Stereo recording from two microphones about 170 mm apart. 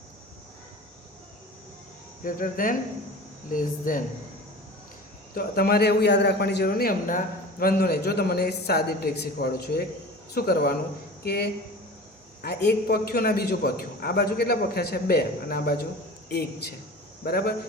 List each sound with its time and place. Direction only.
2.2 s speech: 55° left (ahead or behind)
5.3 s a man's voice: 60° left (ahead or behind)